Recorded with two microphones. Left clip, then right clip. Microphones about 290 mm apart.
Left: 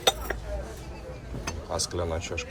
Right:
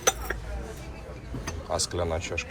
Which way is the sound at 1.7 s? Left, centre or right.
Centre.